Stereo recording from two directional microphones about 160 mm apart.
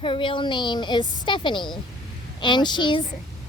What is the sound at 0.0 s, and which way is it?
A woman's voice, 30° left (ahead or behind).